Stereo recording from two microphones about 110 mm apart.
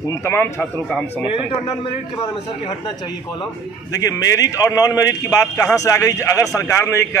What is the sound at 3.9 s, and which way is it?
A man's voice, 35° left (ahead or behind).